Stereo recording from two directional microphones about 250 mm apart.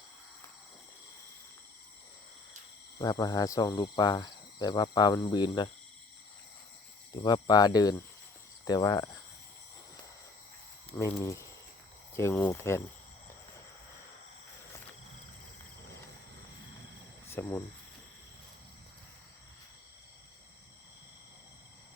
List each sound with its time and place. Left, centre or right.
3.0 s speech: centre
7.2 s speech: centre
10.9 s speech: centre
17.2 s cricket: centre